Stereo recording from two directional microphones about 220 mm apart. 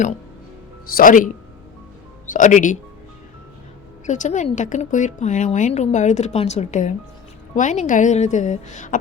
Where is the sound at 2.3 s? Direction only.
35° left (ahead or behind).